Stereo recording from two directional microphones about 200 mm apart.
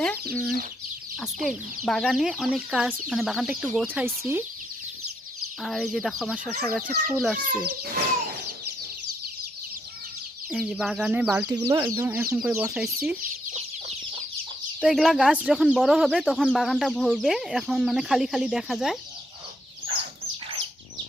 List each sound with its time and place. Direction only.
0.0 s speech: 5° left (ahead or behind); by 4.4 s 10° right (ahead or behind)
5.6 s speech: centre (ahead or behind)
7.4 s a child's voice: 50° right (ahead or behind)
10.5 s speech: centre (ahead or behind)
14.8 s speech: centre (ahead or behind)